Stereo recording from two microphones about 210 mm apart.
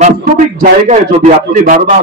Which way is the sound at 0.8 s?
35° right (ahead or behind).